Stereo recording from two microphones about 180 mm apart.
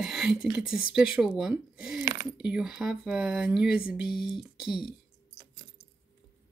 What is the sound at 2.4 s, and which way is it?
Speech, 5° right (ahead or behind).